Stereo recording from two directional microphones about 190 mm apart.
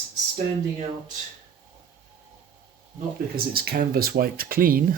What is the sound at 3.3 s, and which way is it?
Speech, 55° right (ahead or behind).